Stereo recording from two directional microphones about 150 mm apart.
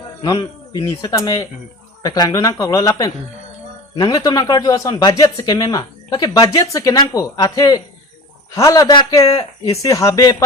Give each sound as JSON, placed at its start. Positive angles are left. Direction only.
{"t": 0.2, "sound": "speech", "side_deg": 30}
{"t": 3.9, "sound": "speech", "side_deg": 25}